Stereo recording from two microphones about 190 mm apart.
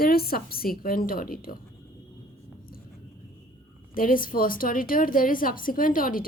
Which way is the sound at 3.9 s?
50° left (ahead or behind).